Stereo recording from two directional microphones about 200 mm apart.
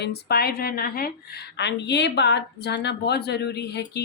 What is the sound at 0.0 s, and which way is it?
A woman's voice, 55° left (ahead or behind).